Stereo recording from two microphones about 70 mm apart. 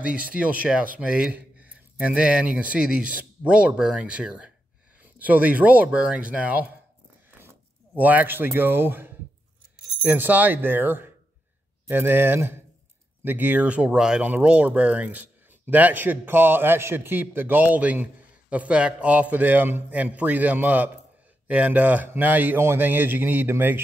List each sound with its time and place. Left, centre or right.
0.0 s speech: centre
7.2 s a sound: right
10.0 s speech: right
14.2 s speech: right